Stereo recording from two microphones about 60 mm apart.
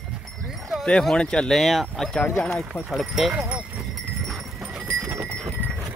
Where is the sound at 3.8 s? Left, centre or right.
Centre.